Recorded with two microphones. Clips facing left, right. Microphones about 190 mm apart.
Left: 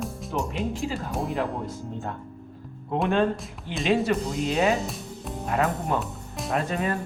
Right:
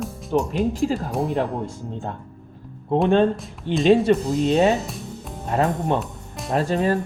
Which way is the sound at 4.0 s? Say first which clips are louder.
Right 6 dB; 30° right (ahead or behind).